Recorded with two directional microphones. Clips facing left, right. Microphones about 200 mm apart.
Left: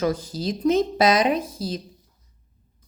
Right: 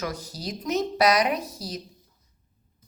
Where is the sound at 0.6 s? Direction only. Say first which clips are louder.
Left 4 dB; 30° left (ahead or behind).